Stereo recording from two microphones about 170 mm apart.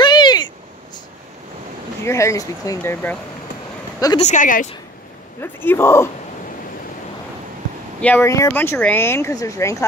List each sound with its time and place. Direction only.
0.0 s a sound: 25° left (ahead or behind)
2.0 s speech: 15° left (ahead or behind)
4.2 s speech: 45° left (ahead or behind)
5.4 s speech: 15° left (ahead or behind)
8.0 s speech: 10° left (ahead or behind)